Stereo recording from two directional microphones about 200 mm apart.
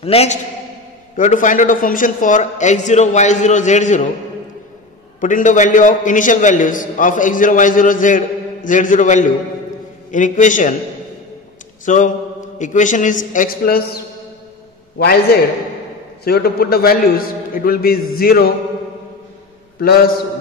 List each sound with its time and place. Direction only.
0.0 s a man's voice: 30° left (ahead or behind)
5.2 s a man's voice: 40° left (ahead or behind)
11.8 s a man's voice: 40° left (ahead or behind)